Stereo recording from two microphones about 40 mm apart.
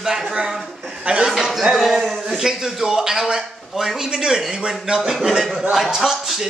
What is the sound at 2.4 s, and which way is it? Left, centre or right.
A man's voice, centre.